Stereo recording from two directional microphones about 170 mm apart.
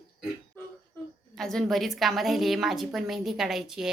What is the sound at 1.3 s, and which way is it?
A woman's voice, 5° left (ahead or behind).